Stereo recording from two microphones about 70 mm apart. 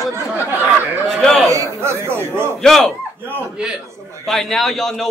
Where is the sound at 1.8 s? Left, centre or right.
Right.